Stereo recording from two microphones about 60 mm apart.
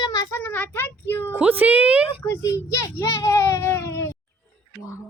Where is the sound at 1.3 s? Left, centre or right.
Right.